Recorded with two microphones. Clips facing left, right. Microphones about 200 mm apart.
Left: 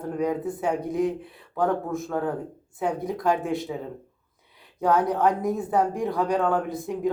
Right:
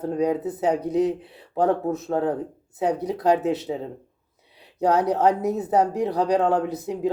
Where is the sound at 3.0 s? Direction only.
75° right (ahead or behind).